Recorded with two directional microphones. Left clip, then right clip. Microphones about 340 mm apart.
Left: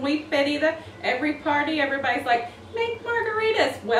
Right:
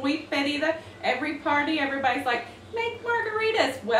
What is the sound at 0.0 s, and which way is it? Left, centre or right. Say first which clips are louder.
A woman's voice: left 4 dB; centre.